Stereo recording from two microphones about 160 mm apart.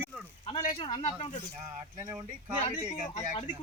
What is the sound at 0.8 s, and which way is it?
Speech, 35° left (ahead or behind).